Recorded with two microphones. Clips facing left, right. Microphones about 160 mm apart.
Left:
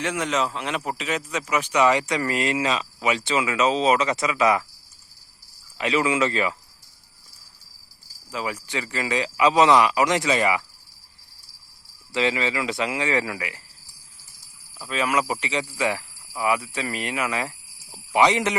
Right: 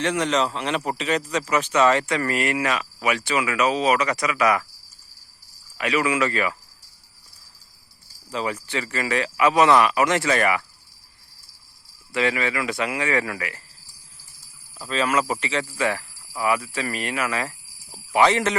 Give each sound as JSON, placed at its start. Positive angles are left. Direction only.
{"t": 0.0, "sound": "a man's voice", "side_deg": 5}
{"t": 5.7, "sound": "speech", "side_deg": 25}
{"t": 8.3, "sound": "speech", "side_deg": 5}
{"t": 12.1, "sound": "speech", "side_deg": 20}
{"t": 14.8, "sound": "speech", "side_deg": 10}